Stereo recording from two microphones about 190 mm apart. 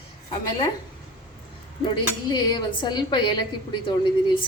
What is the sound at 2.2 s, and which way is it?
A woman's voice, 20° left (ahead or behind).